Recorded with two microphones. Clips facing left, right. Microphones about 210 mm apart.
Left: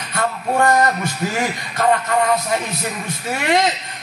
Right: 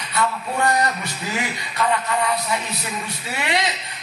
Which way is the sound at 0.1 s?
50° left (ahead or behind).